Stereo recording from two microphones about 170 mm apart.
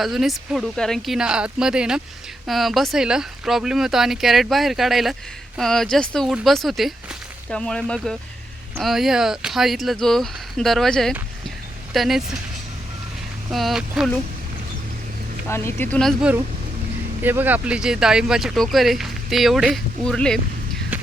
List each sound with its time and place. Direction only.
0.0 s speech: centre (ahead or behind)
13.5 s speech: centre (ahead or behind)
15.4 s speech: 15° left (ahead or behind)
17.2 s speech: 10° right (ahead or behind)